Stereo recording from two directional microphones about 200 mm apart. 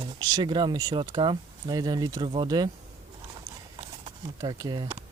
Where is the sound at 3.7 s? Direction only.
20° right (ahead or behind).